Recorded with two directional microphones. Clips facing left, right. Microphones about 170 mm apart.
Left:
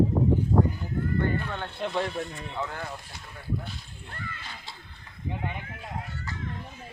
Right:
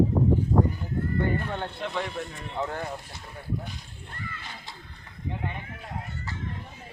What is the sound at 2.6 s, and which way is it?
Speech, 25° right (ahead or behind).